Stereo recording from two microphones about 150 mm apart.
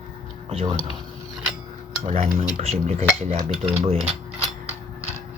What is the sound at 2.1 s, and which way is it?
Speech, 45° right (ahead or behind).